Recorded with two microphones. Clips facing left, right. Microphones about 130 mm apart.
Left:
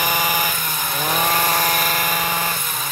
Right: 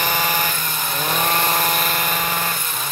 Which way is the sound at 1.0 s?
5° left (ahead or behind).